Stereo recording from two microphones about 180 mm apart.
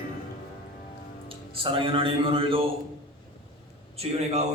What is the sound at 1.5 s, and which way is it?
Speech, 30° right (ahead or behind).